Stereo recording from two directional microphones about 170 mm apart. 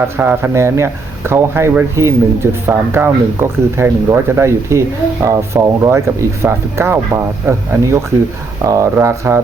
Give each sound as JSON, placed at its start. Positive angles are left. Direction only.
{"t": 0.2, "sound": "speech", "side_deg": -10}